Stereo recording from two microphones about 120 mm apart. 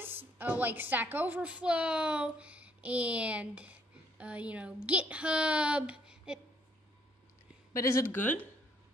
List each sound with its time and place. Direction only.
0.4 s a woman's voice: 15° right (ahead or behind)
7.7 s speech: 25° left (ahead or behind)